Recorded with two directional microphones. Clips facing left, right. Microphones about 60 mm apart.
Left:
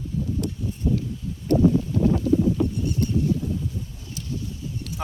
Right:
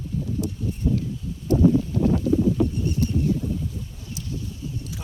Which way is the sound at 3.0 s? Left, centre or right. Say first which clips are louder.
Even; left.